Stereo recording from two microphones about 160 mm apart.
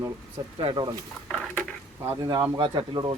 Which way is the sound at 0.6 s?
30° right (ahead or behind).